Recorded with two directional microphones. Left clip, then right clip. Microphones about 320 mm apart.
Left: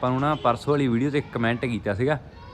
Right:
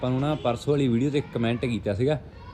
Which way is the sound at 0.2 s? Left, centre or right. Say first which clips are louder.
Left 4 dB; left.